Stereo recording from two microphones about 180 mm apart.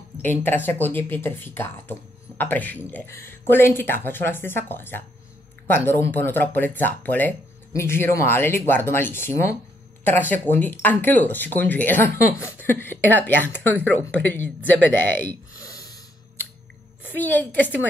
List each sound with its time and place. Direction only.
0.2 s speech: 10° left (ahead or behind)
15.2 s a sound: 20° left (ahead or behind)
17.1 s speech: 10° left (ahead or behind)